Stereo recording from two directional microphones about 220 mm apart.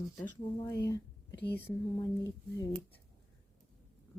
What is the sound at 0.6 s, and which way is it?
Speech, 10° left (ahead or behind).